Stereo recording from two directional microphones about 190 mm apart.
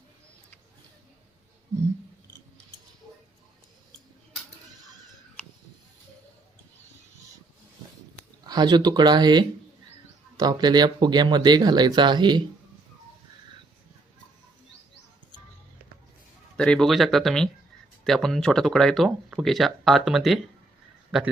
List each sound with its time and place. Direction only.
8.4 s speech: 20° right (ahead or behind)
16.6 s speech: 5° left (ahead or behind)